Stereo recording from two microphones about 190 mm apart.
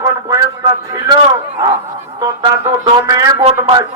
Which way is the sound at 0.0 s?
20° right (ahead or behind).